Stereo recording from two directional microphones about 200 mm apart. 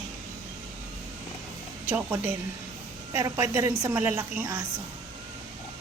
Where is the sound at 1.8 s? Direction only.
10° right (ahead or behind).